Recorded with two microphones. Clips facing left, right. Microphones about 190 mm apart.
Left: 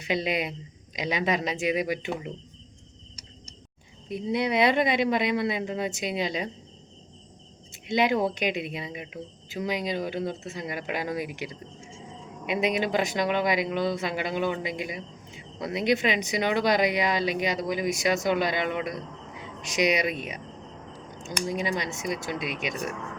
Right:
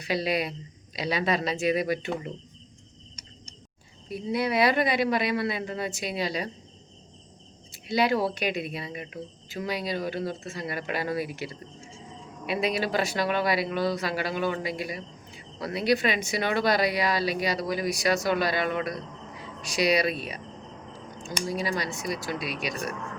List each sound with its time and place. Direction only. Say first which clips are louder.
0.0 s speech: even; 20° left (ahead or behind)
4.1 s speech: left 1 dB; 20° left (ahead or behind)
7.7 s speech: even; 20° left (ahead or behind)
21.4 s speech: left 1 dB; 20° left (ahead or behind)